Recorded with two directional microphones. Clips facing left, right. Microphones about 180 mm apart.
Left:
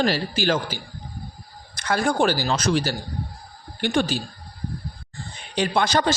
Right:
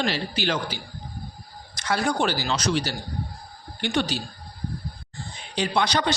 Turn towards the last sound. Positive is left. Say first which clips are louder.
# left 3 dB
turn(degrees=45)  # may be behind; listen again after turning